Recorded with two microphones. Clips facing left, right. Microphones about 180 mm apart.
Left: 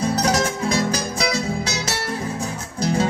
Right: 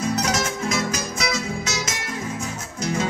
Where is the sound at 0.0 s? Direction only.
35° left (ahead or behind).